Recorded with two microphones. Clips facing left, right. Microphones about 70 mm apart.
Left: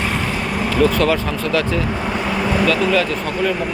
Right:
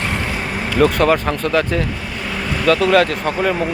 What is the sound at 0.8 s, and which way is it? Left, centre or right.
Speech, right.